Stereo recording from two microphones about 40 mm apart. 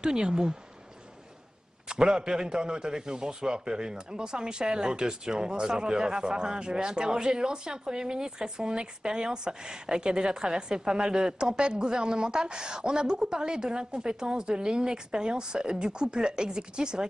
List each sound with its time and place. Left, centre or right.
0.0 s speech: centre
1.9 s a man's voice: right